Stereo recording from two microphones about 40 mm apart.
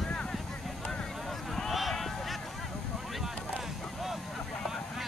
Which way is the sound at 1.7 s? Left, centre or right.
Centre.